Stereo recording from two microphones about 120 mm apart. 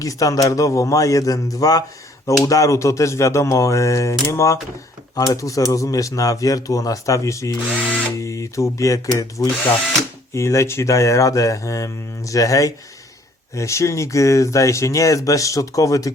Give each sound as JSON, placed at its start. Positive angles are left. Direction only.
{"t": 0.0, "sound": "speech", "side_deg": 30}